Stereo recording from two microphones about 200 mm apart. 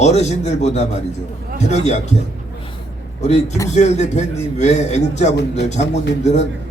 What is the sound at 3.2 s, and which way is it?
A man's voice, 35° left (ahead or behind).